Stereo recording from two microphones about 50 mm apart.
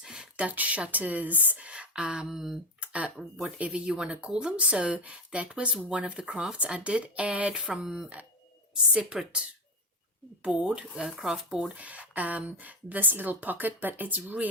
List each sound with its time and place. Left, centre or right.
0.0 s a sound: centre
0.3 s a woman's voice: right; by 2.6 s centre
2.8 s a sound: right
3.4 s speech: right
7.8 s speech: centre
10.4 s speech: centre
11.7 s a woman's voice: right